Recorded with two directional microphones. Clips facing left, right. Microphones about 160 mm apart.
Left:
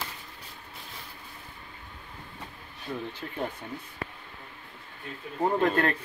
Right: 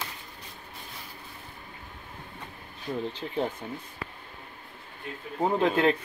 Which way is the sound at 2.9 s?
20° right (ahead or behind).